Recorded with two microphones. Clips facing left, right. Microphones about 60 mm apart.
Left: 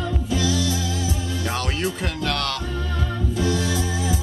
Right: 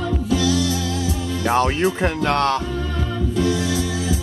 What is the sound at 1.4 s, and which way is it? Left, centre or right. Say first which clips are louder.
Speech: right 9 dB; right.